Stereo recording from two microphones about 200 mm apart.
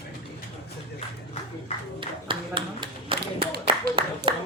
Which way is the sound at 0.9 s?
35° left (ahead or behind).